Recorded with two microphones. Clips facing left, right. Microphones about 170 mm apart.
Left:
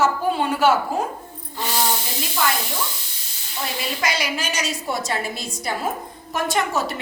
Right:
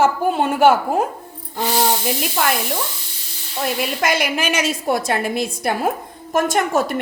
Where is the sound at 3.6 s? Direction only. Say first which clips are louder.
Right 6 dB; 55° right (ahead or behind).